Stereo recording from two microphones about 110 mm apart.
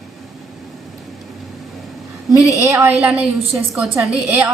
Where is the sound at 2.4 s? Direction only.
30° right (ahead or behind).